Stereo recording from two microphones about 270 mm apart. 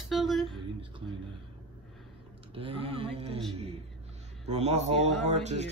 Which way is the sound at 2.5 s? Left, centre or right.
Right.